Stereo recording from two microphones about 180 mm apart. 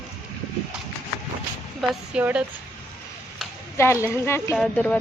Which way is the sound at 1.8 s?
5° right (ahead or behind).